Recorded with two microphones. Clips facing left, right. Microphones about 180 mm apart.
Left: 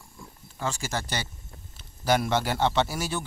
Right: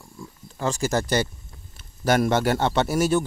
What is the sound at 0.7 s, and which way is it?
Speech, 40° right (ahead or behind).